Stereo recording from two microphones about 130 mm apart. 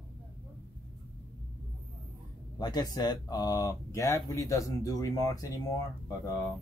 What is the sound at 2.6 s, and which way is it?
Speech, 35° left (ahead or behind).